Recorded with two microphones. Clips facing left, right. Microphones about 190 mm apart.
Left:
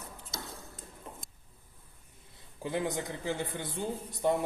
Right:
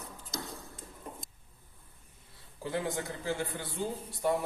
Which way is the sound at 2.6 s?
20° left (ahead or behind).